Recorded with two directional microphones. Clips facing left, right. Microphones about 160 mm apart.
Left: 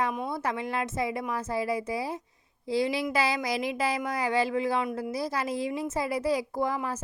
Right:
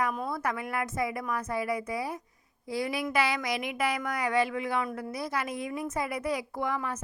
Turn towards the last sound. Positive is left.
turn(degrees=30)  # may be behind; listen again after turning